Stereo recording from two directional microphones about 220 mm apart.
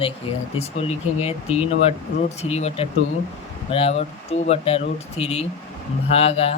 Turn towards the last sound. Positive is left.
turn(degrees=25)  # may be behind; listen again after turning